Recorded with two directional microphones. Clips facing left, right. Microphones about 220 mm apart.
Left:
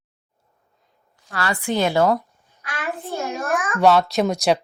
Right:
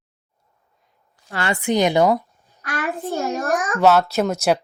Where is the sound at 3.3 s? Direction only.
35° right (ahead or behind).